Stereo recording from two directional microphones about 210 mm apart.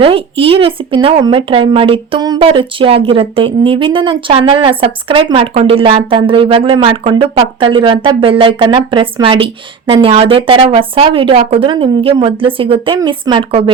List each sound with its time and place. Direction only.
0.0 s speech: 25° right (ahead or behind)